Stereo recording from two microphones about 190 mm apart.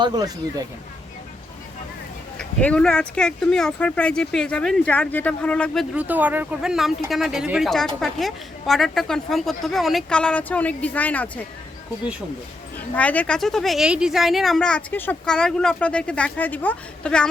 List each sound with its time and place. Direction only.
0.0 s speech: 20° right (ahead or behind)
2.4 s speech: 5° left (ahead or behind)
5.9 s speech: 10° right (ahead or behind); by 11.3 s 10° left (ahead or behind)
13.0 s speech: 5° left (ahead or behind)